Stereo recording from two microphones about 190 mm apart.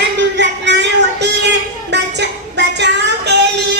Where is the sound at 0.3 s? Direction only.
65° right (ahead or behind).